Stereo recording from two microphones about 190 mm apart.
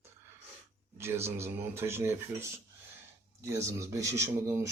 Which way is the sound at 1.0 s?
15° right (ahead or behind).